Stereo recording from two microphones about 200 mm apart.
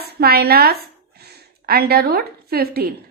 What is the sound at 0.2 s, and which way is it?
A woman's voice, 50° right (ahead or behind).